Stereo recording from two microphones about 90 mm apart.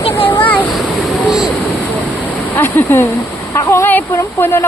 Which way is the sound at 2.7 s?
25° left (ahead or behind).